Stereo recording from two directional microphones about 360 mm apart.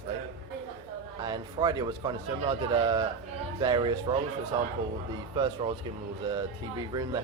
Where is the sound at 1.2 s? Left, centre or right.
Centre.